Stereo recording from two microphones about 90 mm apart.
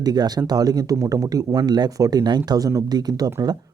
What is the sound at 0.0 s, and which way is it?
A man's voice, 50° right (ahead or behind).